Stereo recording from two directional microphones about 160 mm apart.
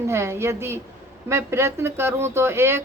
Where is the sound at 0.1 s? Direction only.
15° right (ahead or behind).